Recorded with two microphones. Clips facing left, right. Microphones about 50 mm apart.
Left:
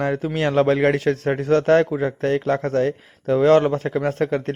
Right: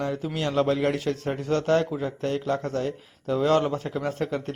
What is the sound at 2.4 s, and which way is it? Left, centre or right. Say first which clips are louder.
Speech: left 7 dB; left.